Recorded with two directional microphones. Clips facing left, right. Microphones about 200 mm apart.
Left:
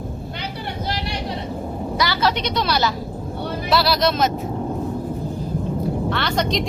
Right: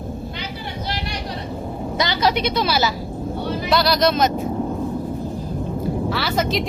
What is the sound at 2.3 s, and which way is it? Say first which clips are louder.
Speech: right 2 dB; 5° right (ahead or behind).